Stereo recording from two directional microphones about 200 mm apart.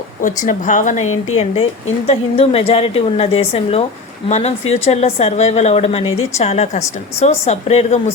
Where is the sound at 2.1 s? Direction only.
30° left (ahead or behind).